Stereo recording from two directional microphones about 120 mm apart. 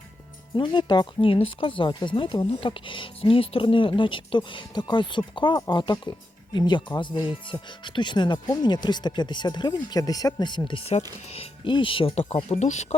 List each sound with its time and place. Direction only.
0.5 s speech: 40° left (ahead or behind)
10.7 s speech: 45° left (ahead or behind)
10.9 s speech: 55° left (ahead or behind)
12.5 s speech: 70° left (ahead or behind)